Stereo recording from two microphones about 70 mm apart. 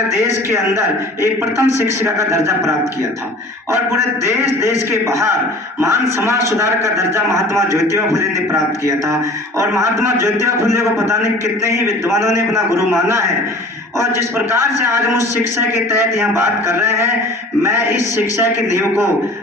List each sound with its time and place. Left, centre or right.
0.5 s a man's voice: right
3.7 s a man's voice: right
14.3 s a man's voice: right